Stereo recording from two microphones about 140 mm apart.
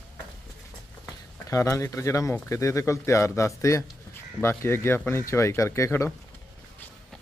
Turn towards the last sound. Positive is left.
turn(degrees=20)  # may be behind; listen again after turning